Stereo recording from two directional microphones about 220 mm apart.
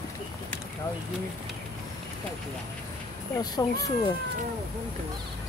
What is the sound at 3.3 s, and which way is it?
Speech, 15° left (ahead or behind).